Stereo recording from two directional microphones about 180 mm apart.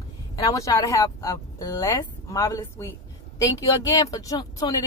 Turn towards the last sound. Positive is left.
turn(degrees=20)  # may be behind; listen again after turning